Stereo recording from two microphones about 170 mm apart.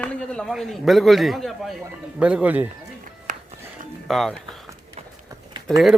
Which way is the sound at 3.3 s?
50° right (ahead or behind).